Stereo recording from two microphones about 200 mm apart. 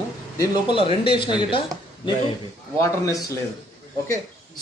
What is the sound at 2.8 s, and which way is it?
Speech, 15° left (ahead or behind).